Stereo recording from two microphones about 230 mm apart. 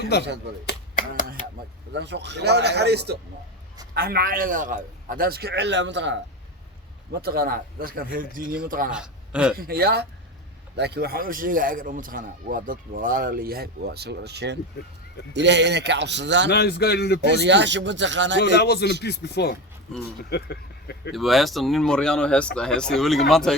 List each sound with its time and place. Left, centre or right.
0.1 s a man's voice: left
0.6 s a sound: left
1.9 s a man's voice: right
8.9 s a man's voice: centre
9.6 s a man's voice: right
16.5 s a man's voice: left
17.2 s a man's voice: right
18.5 s a man's voice: left
21.1 s speech: centre